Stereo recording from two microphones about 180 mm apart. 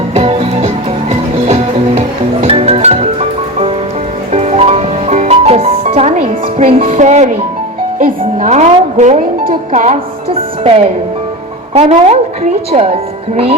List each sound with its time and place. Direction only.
0.1 s music: 35° right (ahead or behind)
2.0 s music: 35° right (ahead or behind)
6.9 s speech: 40° right (ahead or behind)
13.3 s speech: 35° right (ahead or behind)